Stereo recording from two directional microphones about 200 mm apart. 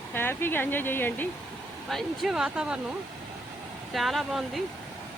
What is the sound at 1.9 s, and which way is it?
Speech, centre (ahead or behind).